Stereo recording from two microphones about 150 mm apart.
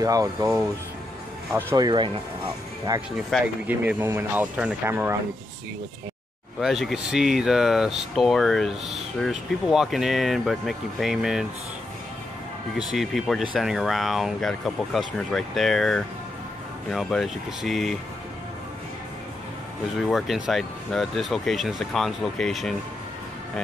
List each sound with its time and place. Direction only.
0.0 s speech: 25° right (ahead or behind)
3.3 s speech: centre (ahead or behind)
3.6 s speech: 10° right (ahead or behind)
6.6 s speech: centre (ahead or behind)
12.7 s speech: centre (ahead or behind)
20.0 s speech: centre (ahead or behind)